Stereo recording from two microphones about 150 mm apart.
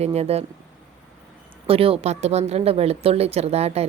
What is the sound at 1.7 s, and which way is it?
Speech, 40° right (ahead or behind).